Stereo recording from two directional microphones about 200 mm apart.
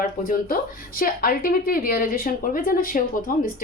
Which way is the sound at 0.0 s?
45° left (ahead or behind).